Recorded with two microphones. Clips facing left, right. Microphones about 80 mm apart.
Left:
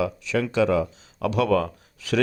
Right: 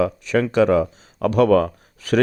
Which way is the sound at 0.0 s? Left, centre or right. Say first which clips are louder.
Right 5 dB; right.